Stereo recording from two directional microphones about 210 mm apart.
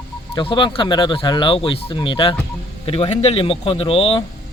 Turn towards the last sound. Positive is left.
turn(degrees=25)  # may be behind; listen again after turning